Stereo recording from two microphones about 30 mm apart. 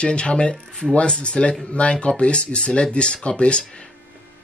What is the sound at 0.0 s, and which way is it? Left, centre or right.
Speech, left.